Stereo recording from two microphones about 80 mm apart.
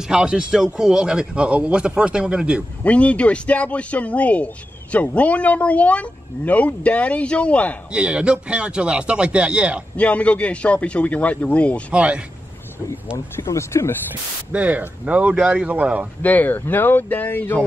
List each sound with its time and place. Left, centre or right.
0.1 s a man's voice: centre
2.8 s speech: centre
7.9 s a man's voice: centre
9.9 s speech: centre
11.9 s a man's voice: centre
13.4 s speech: left
14.5 s a man's voice: centre
16.2 s speech: left